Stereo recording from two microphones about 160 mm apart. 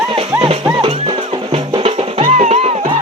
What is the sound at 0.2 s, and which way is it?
Music, 35° right (ahead or behind).